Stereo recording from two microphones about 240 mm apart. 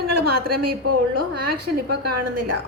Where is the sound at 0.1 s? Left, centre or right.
Right.